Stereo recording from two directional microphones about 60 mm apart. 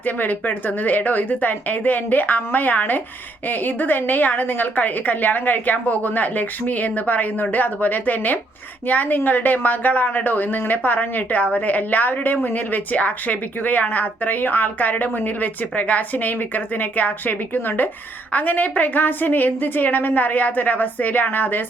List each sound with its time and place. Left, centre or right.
0.0 s speech: left